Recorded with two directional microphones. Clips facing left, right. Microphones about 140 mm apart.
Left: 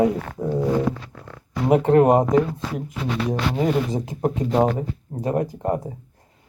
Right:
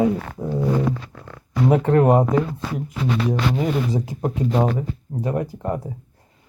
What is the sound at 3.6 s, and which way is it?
Speech, 40° left (ahead or behind).